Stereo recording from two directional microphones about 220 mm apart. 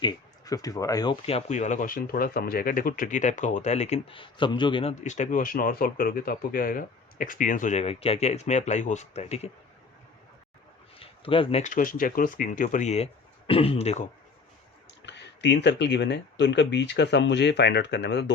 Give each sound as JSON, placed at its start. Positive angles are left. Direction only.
{"t": 0.0, "sound": "speech", "side_deg": 15}
{"t": 11.0, "sound": "speech", "side_deg": 25}
{"t": 15.0, "sound": "speech", "side_deg": 55}